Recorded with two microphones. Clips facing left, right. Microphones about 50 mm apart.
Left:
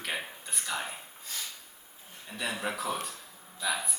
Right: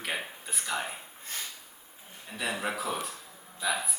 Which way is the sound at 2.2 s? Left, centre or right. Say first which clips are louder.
Right 1 dB; centre.